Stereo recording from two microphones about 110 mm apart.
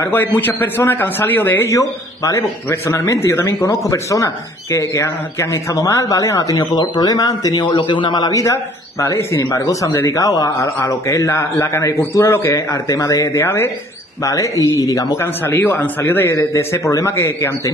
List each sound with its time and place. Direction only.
0.0 s a man's voice: 15° left (ahead or behind)
15.4 s a man's voice: 15° left (ahead or behind)